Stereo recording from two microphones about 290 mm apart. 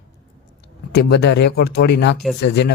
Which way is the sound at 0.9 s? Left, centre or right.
Left.